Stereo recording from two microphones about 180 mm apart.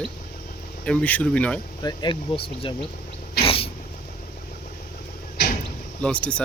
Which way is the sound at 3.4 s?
30° left (ahead or behind).